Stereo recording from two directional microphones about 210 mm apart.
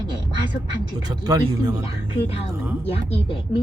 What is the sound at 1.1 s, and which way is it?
Speech, 20° right (ahead or behind).